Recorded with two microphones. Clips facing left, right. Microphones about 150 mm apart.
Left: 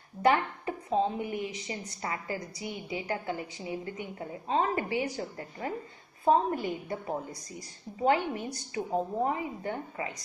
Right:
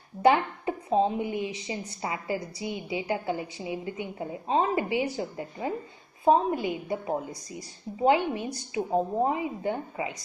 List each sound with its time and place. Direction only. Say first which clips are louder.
0.2 s a woman's voice: right 4 dB; 25° right (ahead or behind)